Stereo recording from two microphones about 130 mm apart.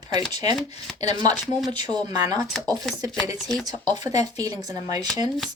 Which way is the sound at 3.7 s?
30° right (ahead or behind).